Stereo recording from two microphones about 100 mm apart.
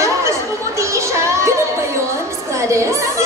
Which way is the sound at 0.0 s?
30° right (ahead or behind).